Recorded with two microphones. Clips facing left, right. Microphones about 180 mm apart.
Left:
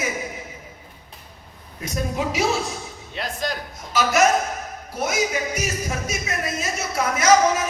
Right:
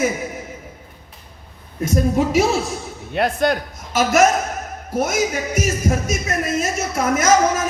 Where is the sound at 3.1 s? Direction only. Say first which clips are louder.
Right 10 dB; 60° right (ahead or behind).